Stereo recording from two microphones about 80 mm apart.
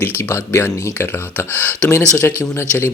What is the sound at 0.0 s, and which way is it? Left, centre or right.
Speech, left.